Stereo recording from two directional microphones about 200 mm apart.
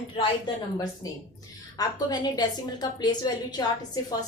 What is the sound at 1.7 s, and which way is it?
A woman's voice, 20° left (ahead or behind).